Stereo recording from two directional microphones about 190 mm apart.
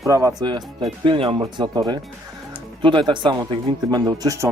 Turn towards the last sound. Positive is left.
turn(degrees=-15)  # may be behind; listen again after turning